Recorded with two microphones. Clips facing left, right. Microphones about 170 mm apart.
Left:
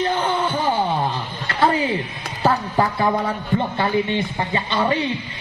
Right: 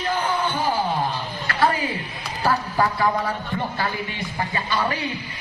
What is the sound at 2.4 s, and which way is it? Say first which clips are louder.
A man's voice: left 3 dB; 25° left (ahead or behind).